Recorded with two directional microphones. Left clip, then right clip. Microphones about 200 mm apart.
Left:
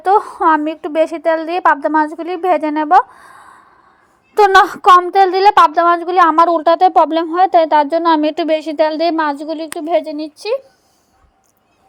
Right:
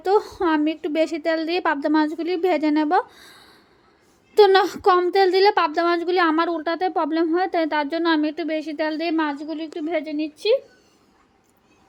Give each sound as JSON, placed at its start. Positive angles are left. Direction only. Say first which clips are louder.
{"t": 0.0, "sound": "a woman's voice", "louder": "left 8 dB", "side_deg": 10}
{"t": 6.4, "sound": "speech", "louder": "left 13 dB", "side_deg": 30}